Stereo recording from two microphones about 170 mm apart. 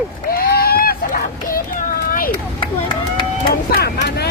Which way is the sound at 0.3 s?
65° left (ahead or behind).